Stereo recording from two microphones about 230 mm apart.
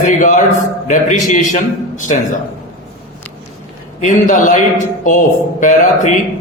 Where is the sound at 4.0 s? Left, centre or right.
Left.